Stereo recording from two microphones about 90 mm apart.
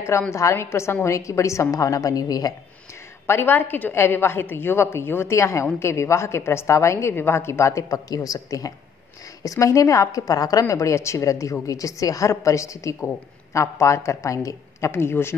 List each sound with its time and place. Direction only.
0.3 s a woman's voice: 30° left (ahead or behind)
3.3 s a woman's voice: 25° left (ahead or behind)